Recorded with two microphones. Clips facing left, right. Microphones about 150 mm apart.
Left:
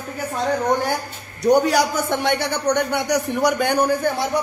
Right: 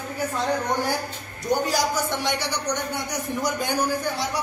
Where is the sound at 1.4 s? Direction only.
65° left (ahead or behind).